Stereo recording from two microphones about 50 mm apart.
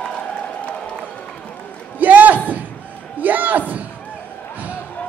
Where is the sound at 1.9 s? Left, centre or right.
Right.